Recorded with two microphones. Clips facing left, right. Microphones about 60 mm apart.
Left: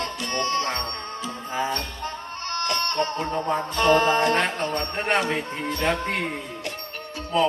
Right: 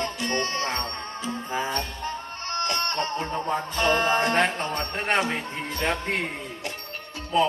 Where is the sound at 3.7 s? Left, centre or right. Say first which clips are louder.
Left 4 dB; right.